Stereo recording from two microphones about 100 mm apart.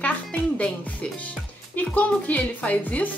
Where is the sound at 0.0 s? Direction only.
10° left (ahead or behind).